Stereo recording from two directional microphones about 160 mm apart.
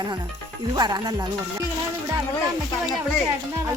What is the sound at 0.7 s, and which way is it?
Speech, 25° right (ahead or behind).